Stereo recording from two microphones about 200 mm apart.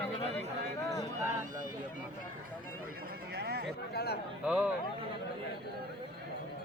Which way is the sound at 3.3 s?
50° right (ahead or behind).